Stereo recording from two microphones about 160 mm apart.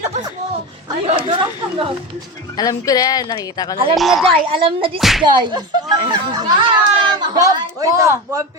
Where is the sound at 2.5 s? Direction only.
20° left (ahead or behind).